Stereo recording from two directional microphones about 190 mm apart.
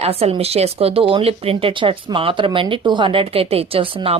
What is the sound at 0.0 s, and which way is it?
Speech, 30° right (ahead or behind).